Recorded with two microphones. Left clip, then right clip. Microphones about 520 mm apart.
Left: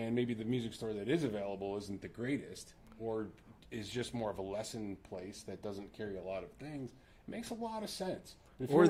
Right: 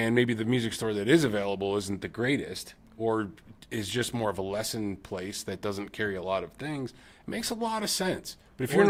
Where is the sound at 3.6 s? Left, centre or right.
Right.